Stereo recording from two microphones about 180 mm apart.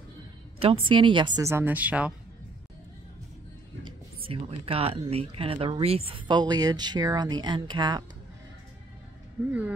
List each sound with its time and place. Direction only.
0.8 s a woman's voice: 25° right (ahead or behind); by 2.1 s 10° right (ahead or behind)
3.8 s speech: 30° right (ahead or behind)